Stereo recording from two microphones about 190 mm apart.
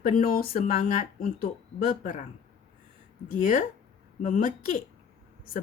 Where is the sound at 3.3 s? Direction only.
45° left (ahead or behind).